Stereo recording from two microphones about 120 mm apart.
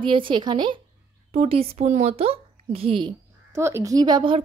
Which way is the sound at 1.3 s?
55° right (ahead or behind).